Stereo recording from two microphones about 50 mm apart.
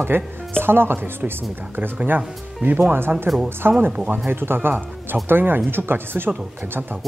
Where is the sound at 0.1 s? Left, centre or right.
Right.